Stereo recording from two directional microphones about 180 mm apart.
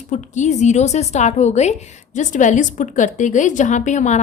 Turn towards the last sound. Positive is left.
turn(degrees=40)  # may be behind; listen again after turning